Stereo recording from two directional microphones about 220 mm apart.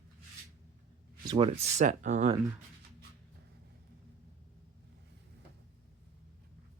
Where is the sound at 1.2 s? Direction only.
20° right (ahead or behind).